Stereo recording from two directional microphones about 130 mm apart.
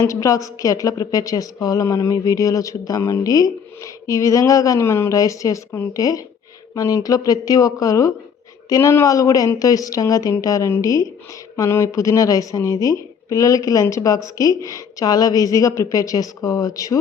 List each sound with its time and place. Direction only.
0.0 s a woman's voice: 25° left (ahead or behind)